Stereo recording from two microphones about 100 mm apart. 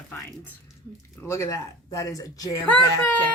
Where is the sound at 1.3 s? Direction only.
35° left (ahead or behind).